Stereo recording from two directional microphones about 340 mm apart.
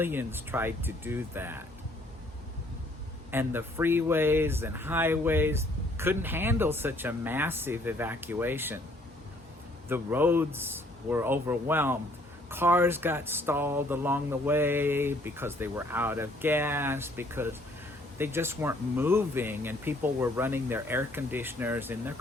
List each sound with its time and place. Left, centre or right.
0.0 s speech: centre
3.3 s speech: centre
9.9 s speech: centre